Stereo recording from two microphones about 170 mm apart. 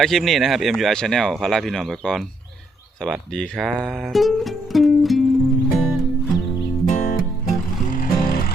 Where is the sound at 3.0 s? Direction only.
5° left (ahead or behind).